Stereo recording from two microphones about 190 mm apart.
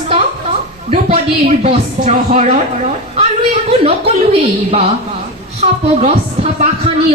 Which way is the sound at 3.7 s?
30° right (ahead or behind).